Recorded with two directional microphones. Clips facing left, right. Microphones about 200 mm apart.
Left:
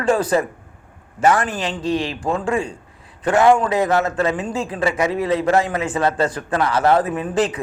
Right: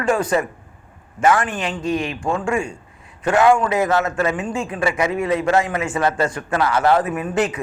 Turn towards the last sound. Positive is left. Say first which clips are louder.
# left 1 dB
turn(degrees=35)  # may be behind; listen again after turning